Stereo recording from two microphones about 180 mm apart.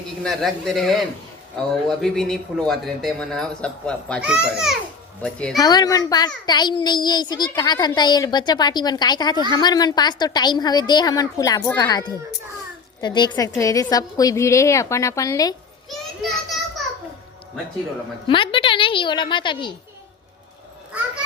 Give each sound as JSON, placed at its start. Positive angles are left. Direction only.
{"t": 0.2, "sound": "speech", "side_deg": 0}
{"t": 5.5, "sound": "a child's voice", "side_deg": 20}
{"t": 15.9, "sound": "children playing", "side_deg": 0}
{"t": 18.3, "sound": "a child's voice", "side_deg": 30}